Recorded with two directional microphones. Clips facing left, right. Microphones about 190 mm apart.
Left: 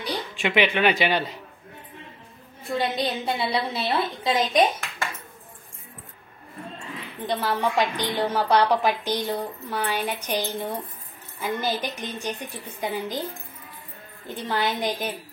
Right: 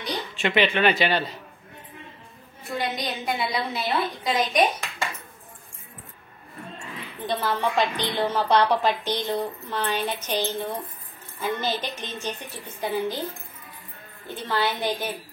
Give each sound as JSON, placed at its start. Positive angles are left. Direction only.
{"t": 0.0, "sound": "speech", "side_deg": 10}
{"t": 2.6, "sound": "a woman's voice", "side_deg": 25}
{"t": 7.2, "sound": "a woman's voice", "side_deg": 15}
{"t": 14.2, "sound": "a woman's voice", "side_deg": 15}